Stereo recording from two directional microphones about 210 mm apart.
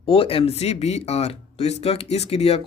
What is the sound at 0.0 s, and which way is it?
Speech, 25° left (ahead or behind).